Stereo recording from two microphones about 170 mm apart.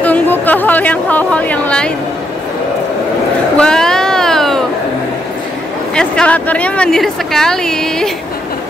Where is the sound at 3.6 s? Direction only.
5° left (ahead or behind).